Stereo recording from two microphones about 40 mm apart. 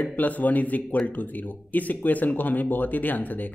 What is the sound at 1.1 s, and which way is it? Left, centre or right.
A man's voice, left.